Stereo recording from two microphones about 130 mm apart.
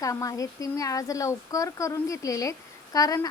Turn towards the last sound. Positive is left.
turn(degrees=30)  # may be behind; listen again after turning